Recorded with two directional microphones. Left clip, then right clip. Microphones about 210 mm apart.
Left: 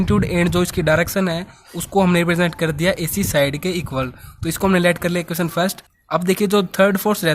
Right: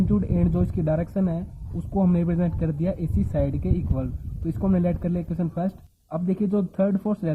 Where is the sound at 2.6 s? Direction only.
30° left (ahead or behind).